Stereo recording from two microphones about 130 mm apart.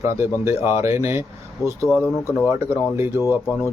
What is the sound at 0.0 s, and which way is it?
Speech, 20° right (ahead or behind).